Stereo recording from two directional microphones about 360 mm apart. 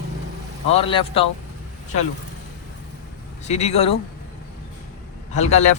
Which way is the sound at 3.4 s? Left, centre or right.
Centre.